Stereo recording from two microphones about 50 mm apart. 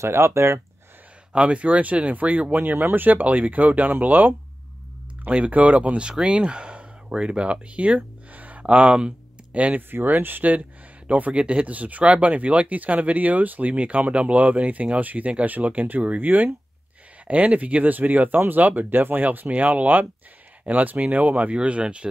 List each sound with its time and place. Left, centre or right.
0.0 s speech: right
1.3 s speech: right
9.8 s speech: right